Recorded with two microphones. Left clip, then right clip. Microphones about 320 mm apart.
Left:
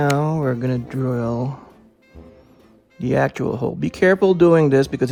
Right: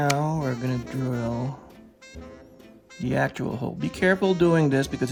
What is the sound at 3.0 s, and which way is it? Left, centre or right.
Speech, centre.